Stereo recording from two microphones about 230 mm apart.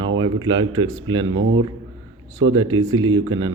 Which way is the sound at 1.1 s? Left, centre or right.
Right.